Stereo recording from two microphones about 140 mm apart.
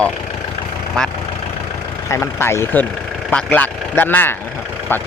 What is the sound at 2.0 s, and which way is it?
Speech, 20° left (ahead or behind).